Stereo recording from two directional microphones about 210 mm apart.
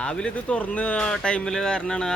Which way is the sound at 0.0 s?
5° left (ahead or behind).